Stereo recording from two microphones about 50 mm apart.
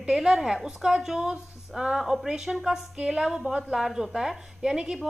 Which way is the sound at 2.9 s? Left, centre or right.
Centre.